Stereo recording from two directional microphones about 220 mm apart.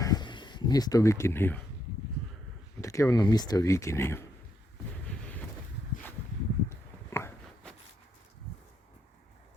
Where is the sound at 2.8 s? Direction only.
15° left (ahead or behind).